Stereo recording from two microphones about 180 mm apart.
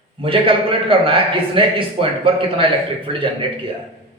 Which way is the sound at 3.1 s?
30° right (ahead or behind).